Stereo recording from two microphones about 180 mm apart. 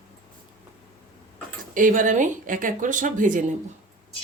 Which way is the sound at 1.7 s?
45° right (ahead or behind).